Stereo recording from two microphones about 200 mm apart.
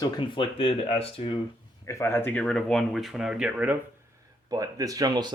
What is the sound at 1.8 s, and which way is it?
Speech, 15° left (ahead or behind).